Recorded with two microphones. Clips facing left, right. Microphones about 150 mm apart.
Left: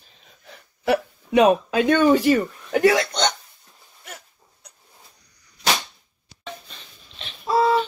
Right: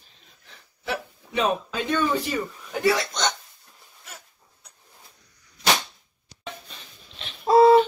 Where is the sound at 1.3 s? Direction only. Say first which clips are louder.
Left 9 dB; 65° left (ahead or behind).